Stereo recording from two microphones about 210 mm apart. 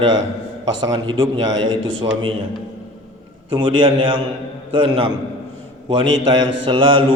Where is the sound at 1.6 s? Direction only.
65° right (ahead or behind).